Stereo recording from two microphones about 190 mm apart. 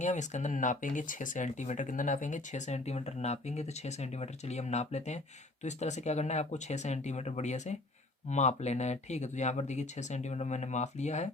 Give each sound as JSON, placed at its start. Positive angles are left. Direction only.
{"t": 0.0, "sound": "speech", "side_deg": 40}